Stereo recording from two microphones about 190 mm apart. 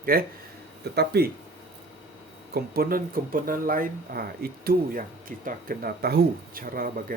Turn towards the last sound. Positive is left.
turn(degrees=-50)  # may be behind; listen again after turning